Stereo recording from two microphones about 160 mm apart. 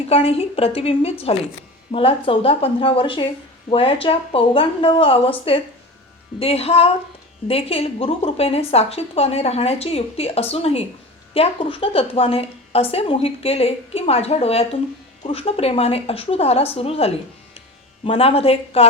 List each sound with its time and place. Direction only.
0.1 s a woman's voice: 40° left (ahead or behind)